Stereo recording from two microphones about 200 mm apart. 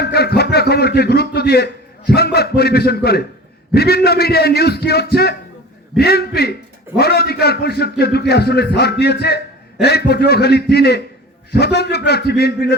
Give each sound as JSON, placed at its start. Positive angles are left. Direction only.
{"t": 0.0, "sound": "a man's voice", "side_deg": 55}